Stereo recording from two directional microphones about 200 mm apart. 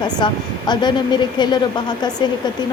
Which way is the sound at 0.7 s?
20° left (ahead or behind).